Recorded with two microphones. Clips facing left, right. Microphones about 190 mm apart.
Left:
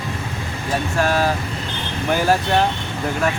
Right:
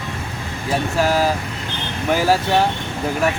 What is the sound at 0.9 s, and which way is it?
Speech, 10° right (ahead or behind).